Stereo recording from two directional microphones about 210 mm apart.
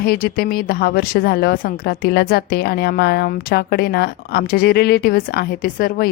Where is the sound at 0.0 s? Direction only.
45° left (ahead or behind).